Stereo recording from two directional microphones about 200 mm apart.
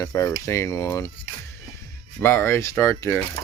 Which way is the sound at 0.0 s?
15° left (ahead or behind).